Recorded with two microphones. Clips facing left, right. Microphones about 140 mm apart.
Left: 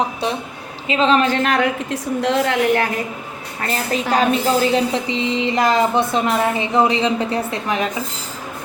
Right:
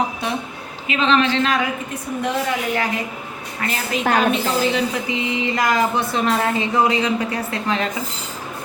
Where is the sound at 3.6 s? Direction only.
40° left (ahead or behind).